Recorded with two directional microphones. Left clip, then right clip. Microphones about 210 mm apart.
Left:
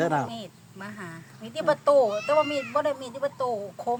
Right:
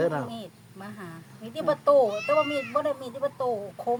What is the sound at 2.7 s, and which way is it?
Speech, 15° left (ahead or behind).